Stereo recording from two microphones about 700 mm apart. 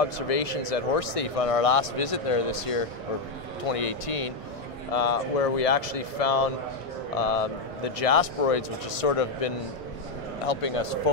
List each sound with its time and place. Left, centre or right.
0.0 s speech: left